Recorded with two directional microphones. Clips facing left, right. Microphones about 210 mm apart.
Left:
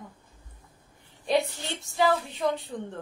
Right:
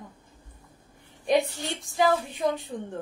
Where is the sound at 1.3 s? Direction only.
15° right (ahead or behind).